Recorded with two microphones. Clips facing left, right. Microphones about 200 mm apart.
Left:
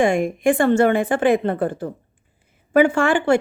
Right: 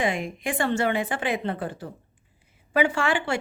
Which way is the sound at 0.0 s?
50° left (ahead or behind).